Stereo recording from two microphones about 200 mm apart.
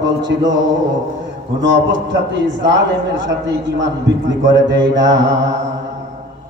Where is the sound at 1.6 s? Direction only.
60° right (ahead or behind).